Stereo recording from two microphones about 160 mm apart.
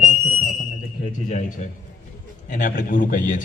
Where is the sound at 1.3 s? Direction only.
45° left (ahead or behind).